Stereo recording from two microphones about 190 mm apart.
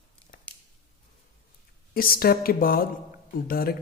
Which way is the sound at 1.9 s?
50° left (ahead or behind).